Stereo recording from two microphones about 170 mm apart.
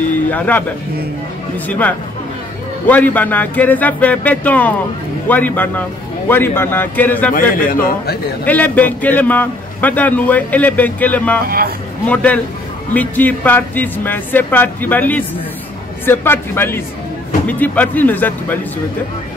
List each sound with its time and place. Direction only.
0.3 s a man's voice: 10° left (ahead or behind)
1.7 s a man's voice: 10° left (ahead or behind)
7.5 s a man's voice: 55° left (ahead or behind)
8.5 s a man's voice: 10° left (ahead or behind)
11.4 s a man's voice: 60° right (ahead or behind)
12.1 s a man's voice: 10° left (ahead or behind)